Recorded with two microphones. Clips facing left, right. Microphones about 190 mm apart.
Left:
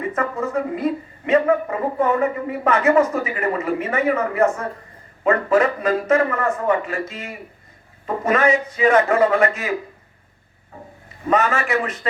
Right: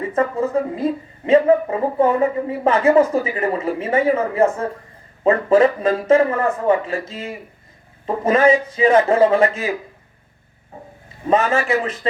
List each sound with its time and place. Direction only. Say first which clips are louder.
0.1 s a sound: right 6 dB; 30° right (ahead or behind)
5.2 s a man's voice: right 3 dB; 30° right (ahead or behind)
11.3 s a man's voice: right 2 dB; 30° right (ahead or behind)